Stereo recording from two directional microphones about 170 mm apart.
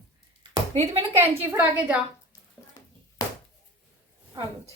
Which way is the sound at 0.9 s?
15° right (ahead or behind).